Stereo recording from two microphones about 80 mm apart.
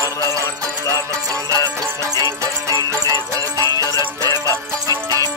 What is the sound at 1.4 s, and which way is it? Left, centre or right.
Music, right.